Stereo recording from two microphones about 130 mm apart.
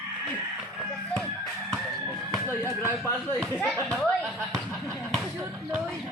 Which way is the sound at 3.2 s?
10° left (ahead or behind).